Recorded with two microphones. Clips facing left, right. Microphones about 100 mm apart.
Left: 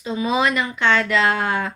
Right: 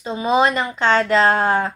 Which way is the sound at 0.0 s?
35° right (ahead or behind).